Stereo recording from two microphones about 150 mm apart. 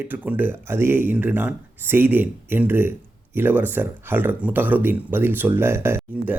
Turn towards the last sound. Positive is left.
turn(degrees=-15)  # may be behind; listen again after turning